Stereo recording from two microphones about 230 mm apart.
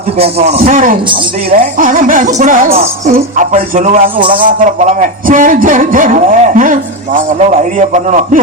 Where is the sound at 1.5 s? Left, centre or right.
Right.